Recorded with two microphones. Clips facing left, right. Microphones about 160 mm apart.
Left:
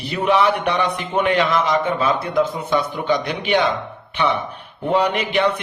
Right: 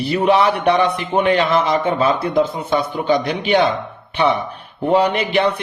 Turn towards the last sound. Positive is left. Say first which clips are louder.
# right 2 dB
turn(degrees=-35)  # may be behind; listen again after turning